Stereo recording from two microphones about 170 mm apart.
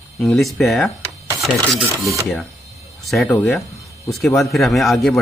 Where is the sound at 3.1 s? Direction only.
5° left (ahead or behind).